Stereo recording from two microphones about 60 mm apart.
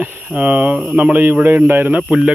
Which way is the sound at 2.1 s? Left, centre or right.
Centre.